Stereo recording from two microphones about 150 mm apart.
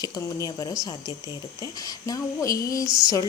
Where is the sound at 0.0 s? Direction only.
25° left (ahead or behind).